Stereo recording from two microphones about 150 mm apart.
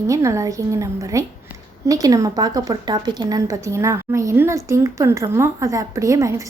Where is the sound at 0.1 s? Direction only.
20° right (ahead or behind).